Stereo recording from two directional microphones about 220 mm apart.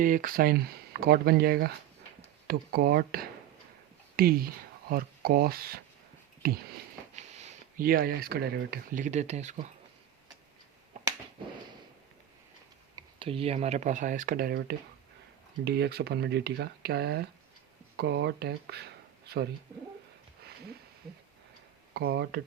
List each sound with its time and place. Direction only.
0.0 s speech: 40° right (ahead or behind)
7.2 s speech: 30° right (ahead or behind)
13.0 s speech: 25° right (ahead or behind); by 19.5 s 45° right (ahead or behind)
21.9 s speech: 50° right (ahead or behind)